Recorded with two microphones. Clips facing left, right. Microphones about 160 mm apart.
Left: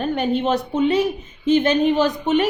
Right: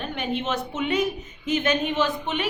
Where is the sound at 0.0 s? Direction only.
40° left (ahead or behind).